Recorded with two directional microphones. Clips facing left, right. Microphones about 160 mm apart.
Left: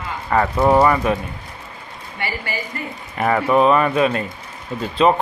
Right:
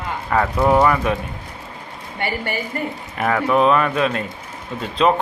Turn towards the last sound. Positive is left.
turn(degrees=0)  # may be behind; listen again after turning